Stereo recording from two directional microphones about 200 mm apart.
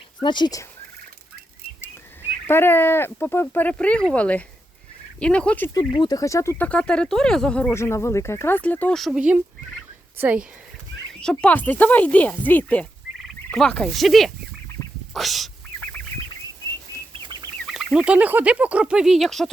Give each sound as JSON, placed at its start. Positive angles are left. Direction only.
{"t": 0.2, "sound": "speech", "side_deg": 20}
{"t": 2.5, "sound": "speech", "side_deg": 10}
{"t": 5.7, "sound": "speech", "side_deg": 20}
{"t": 11.1, "sound": "speech", "side_deg": 5}
{"t": 17.7, "sound": "speech", "side_deg": 0}